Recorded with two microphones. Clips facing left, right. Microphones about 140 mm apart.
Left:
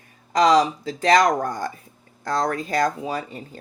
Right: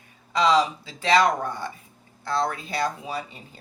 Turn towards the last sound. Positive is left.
turn(degrees=45)  # may be behind; listen again after turning